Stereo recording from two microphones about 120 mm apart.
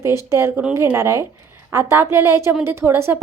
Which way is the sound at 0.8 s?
25° right (ahead or behind).